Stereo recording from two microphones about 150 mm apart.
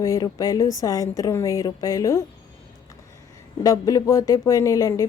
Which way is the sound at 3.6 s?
25° left (ahead or behind).